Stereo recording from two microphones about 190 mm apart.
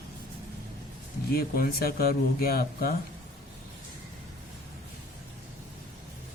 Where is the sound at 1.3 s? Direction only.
50° left (ahead or behind).